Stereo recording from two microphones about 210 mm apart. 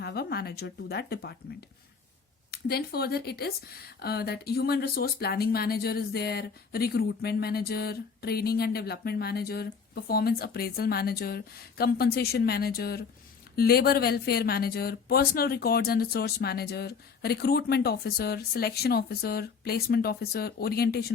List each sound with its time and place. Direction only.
0.0 s speech: 50° left (ahead or behind)
2.5 s speech: 50° left (ahead or behind)